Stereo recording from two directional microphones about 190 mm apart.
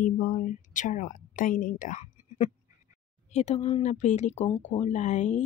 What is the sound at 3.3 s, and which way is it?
Speech, 35° left (ahead or behind).